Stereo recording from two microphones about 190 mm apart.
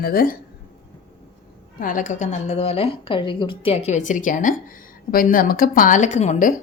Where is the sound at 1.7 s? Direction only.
45° left (ahead or behind).